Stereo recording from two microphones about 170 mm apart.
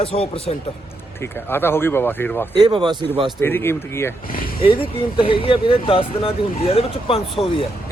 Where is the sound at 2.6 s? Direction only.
25° right (ahead or behind).